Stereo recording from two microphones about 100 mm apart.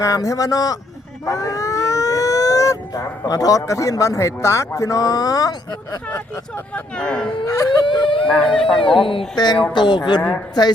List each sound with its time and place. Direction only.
0.0 s a man's voice: 35° left (ahead or behind)
6.1 s speech: 20° left (ahead or behind)
7.4 s a man's voice: 35° left (ahead or behind)
7.9 s speech: 55° left (ahead or behind)
8.3 s speech: 10° left (ahead or behind)
9.0 s speech: 60° left (ahead or behind)
9.7 s speech: 50° left (ahead or behind)